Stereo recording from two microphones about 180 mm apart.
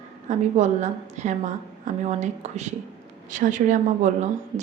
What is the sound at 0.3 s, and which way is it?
A woman's voice, 40° right (ahead or behind).